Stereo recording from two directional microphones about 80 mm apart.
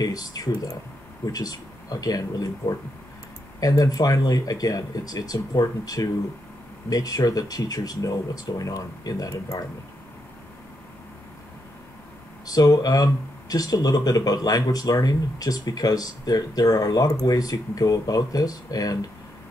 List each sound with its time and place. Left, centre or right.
0.0 s speech: left
12.4 s speech: left